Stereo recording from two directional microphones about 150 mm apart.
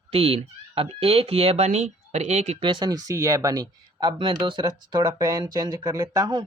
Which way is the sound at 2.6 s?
30° right (ahead or behind).